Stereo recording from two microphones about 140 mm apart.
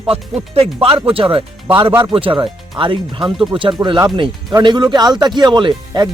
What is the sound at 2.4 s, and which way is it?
Speech, 40° right (ahead or behind).